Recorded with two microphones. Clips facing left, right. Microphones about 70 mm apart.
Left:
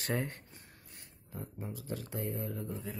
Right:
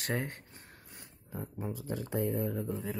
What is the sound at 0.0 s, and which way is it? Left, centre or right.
Speech, right.